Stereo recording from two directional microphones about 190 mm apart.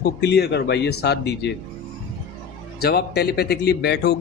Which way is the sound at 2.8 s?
55° left (ahead or behind).